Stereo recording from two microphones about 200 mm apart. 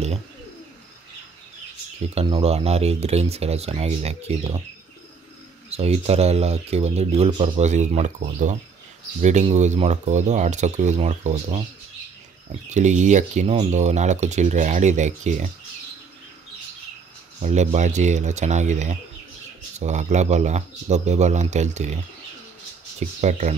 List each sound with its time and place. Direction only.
2.1 s speech: 25° right (ahead or behind)
5.7 s speech: 30° right (ahead or behind)
12.6 s speech: 35° right (ahead or behind)
17.4 s speech: 35° right (ahead or behind)
22.9 s speech: 35° right (ahead or behind)